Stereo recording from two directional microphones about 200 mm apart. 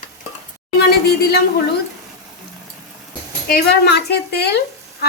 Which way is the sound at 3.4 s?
55° left (ahead or behind).